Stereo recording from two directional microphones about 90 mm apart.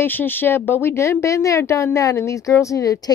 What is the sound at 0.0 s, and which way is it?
Speech, 20° left (ahead or behind).